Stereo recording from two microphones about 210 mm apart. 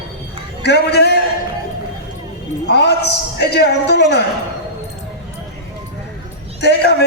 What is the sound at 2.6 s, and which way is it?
A man's voice, 55° left (ahead or behind).